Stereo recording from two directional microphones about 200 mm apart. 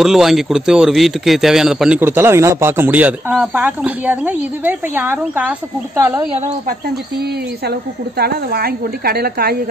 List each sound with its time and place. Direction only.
0.0 s a man's voice: centre (ahead or behind)
8.2 s a woman's voice: 50° right (ahead or behind)